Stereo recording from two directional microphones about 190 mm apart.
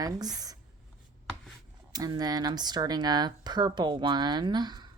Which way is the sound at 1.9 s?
20° right (ahead or behind).